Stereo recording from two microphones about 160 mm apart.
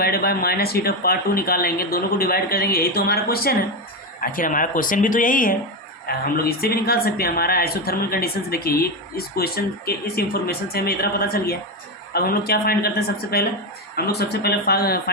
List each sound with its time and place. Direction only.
0.0 s a woman's voice: 70° left (ahead or behind)
4.2 s speech: 60° left (ahead or behind)
6.1 s a woman's voice: 70° left (ahead or behind)